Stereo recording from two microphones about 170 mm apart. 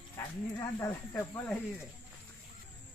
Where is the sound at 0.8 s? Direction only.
15° left (ahead or behind).